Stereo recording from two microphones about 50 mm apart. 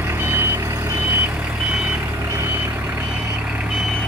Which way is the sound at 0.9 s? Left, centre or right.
Right.